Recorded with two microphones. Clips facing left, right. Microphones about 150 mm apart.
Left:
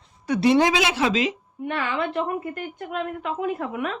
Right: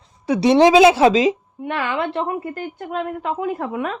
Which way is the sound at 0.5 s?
25° right (ahead or behind).